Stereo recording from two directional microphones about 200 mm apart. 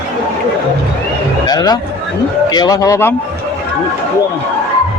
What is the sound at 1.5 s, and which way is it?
A man's voice, 20° left (ahead or behind).